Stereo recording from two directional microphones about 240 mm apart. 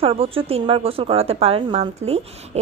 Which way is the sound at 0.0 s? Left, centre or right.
Right.